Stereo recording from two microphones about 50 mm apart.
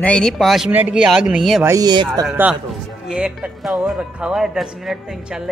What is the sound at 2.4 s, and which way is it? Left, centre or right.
Speech, right.